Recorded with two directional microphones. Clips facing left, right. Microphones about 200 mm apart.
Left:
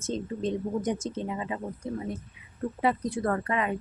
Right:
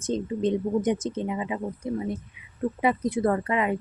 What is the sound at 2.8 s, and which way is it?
Speech, 15° right (ahead or behind).